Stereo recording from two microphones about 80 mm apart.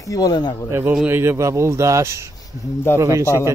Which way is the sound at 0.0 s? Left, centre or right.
Left.